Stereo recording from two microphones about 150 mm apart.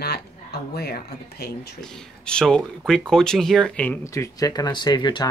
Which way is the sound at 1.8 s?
5° left (ahead or behind).